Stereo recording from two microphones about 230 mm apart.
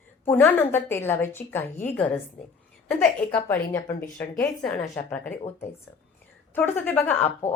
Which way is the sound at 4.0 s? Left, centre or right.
Centre.